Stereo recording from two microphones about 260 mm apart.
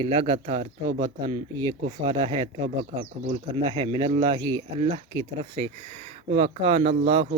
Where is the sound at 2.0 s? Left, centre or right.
Right.